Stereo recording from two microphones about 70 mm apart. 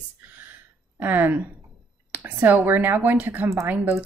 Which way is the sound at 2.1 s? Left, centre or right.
Right.